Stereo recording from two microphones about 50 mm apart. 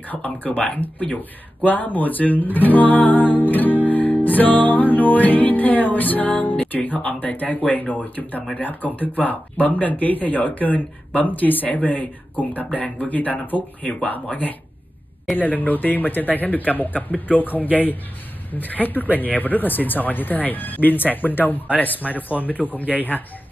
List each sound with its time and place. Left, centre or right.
0.1 s speech: left